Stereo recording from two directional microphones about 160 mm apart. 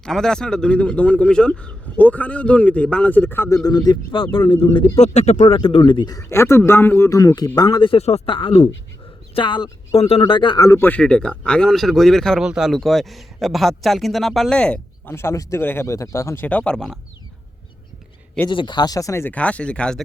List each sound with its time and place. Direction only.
0.0 s speech: 5° left (ahead or behind); by 5.0 s 35° left (ahead or behind)
5.0 s speech: 45° left (ahead or behind)
5.5 s a man's voice: 30° left (ahead or behind)
10.7 s speech: 15° left (ahead or behind)
18.4 s speech: 30° left (ahead or behind); by 20.0 s 5° left (ahead or behind)